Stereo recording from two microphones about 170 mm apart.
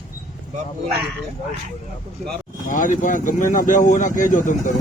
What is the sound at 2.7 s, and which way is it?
Speech, 50° left (ahead or behind).